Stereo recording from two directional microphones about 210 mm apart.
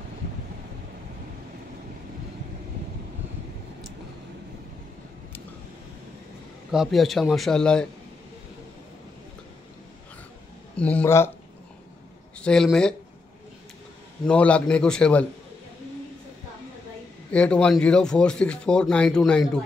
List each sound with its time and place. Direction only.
6.7 s speech: centre (ahead or behind)
10.8 s speech: 5° left (ahead or behind)
12.4 s speech: 5° left (ahead or behind)
14.2 s speech: 5° left (ahead or behind)
17.3 s speech: 5° left (ahead or behind)